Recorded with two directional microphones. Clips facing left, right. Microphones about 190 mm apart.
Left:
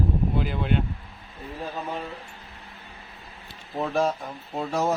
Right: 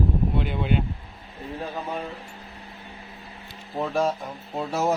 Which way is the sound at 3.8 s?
Centre (ahead or behind).